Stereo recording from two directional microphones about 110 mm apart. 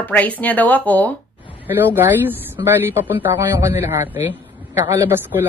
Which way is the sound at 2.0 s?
20° right (ahead or behind).